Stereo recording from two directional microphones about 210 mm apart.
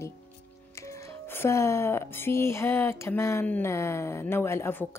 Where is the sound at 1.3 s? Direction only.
15° left (ahead or behind).